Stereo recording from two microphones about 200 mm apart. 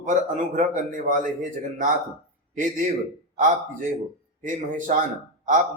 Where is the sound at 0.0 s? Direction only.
40° right (ahead or behind).